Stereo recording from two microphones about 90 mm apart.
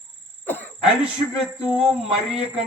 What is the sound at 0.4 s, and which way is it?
Throat clearing, 20° left (ahead or behind).